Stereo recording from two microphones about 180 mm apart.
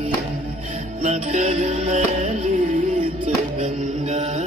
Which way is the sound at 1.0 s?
40° right (ahead or behind).